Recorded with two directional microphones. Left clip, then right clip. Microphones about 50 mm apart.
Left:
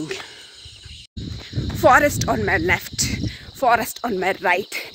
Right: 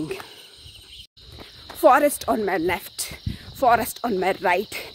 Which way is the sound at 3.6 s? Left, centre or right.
Right.